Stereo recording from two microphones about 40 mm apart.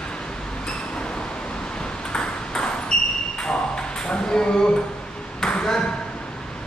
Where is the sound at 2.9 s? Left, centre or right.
Centre.